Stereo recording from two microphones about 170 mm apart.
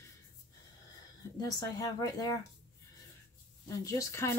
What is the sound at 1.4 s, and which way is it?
Speech, 20° left (ahead or behind).